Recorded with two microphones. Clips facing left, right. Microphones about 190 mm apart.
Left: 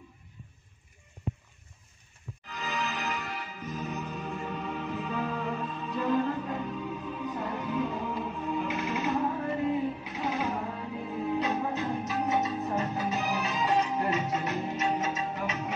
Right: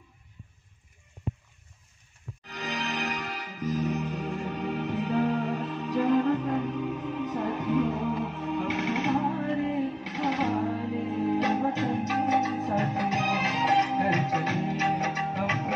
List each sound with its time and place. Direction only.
2.5 s music: 70° right (ahead or behind); by 15.7 s 90° right